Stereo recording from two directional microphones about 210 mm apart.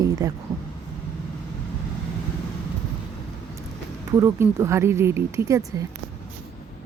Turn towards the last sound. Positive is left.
turn(degrees=-15)  # may be behind; listen again after turning